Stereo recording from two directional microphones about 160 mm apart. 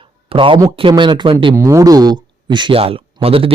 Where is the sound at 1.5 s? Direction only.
20° right (ahead or behind).